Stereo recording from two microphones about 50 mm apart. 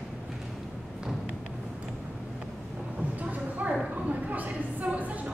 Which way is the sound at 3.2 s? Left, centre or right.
Right.